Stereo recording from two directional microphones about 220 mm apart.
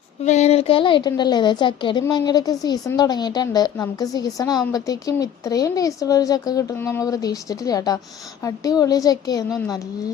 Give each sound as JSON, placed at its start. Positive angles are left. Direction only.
{"t": 0.3, "sound": "a woman's voice", "side_deg": 30}